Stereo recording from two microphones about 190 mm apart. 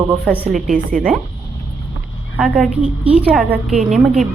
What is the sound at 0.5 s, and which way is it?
Speech, 45° right (ahead or behind).